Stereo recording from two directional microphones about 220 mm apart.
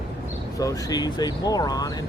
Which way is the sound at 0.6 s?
15° left (ahead or behind).